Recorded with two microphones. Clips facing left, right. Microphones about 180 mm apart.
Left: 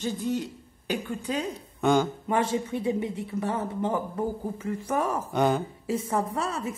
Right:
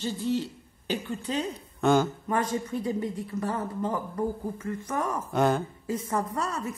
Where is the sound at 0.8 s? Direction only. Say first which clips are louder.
Left 1 dB; 10° left (ahead or behind).